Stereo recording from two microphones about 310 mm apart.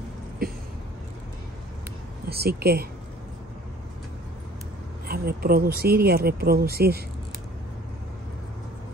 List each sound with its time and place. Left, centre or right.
0.4 s a sound: right
2.2 s speech: right
5.0 s speech: right